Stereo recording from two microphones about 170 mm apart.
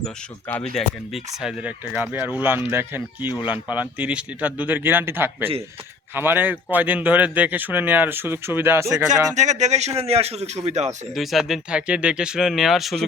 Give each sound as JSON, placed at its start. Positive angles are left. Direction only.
{"t": 0.0, "sound": "speech", "side_deg": 10}
{"t": 9.0, "sound": "a man's voice", "side_deg": -45}
{"t": 11.1, "sound": "speech", "side_deg": 0}